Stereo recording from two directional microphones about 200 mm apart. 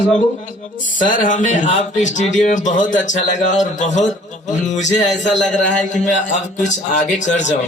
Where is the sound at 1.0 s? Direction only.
40° left (ahead or behind).